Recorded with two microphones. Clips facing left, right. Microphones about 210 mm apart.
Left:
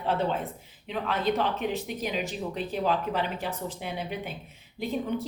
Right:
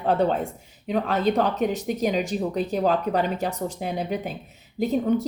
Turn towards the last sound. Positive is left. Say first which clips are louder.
# right 8 dB
turn(degrees=-45)  # may be behind; listen again after turning